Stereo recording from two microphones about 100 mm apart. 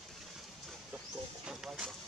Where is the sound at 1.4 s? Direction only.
5° right (ahead or behind).